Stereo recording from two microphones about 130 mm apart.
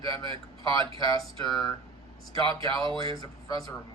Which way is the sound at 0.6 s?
30° left (ahead or behind).